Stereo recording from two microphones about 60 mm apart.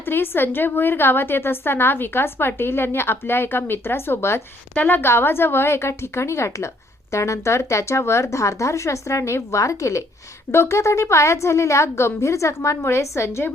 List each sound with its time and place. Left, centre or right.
0.0 s a woman's voice: left
4.7 s a woman's voice: left
10.5 s a woman's voice: left